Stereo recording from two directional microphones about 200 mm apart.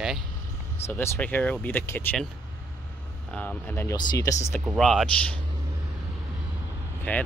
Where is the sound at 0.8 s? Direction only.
15° left (ahead or behind).